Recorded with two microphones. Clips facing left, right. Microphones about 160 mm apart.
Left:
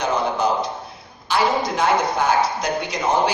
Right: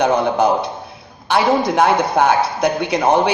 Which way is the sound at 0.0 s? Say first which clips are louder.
Right 6 dB; 60° right (ahead or behind).